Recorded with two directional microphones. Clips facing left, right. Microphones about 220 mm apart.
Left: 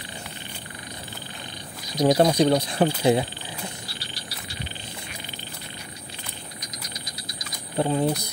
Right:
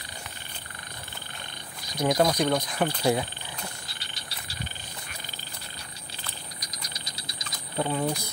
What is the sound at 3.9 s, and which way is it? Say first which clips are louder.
Cricket: left 6 dB; 25° right (ahead or behind).